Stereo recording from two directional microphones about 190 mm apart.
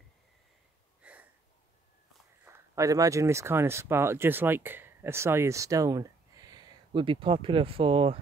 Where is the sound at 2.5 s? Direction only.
15° right (ahead or behind).